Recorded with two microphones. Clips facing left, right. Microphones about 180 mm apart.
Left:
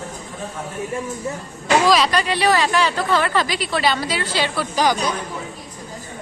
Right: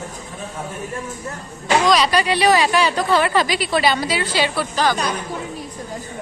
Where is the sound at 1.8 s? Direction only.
Centre (ahead or behind).